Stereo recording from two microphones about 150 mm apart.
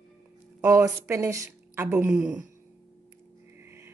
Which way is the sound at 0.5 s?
20° right (ahead or behind).